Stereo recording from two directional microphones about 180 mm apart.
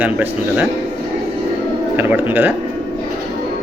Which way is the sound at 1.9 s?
10° right (ahead or behind).